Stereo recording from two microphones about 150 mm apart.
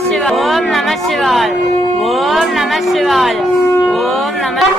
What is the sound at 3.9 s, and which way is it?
Shofar, centre (ahead or behind).